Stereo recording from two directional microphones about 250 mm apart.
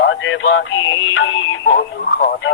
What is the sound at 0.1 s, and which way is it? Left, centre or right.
Music, left.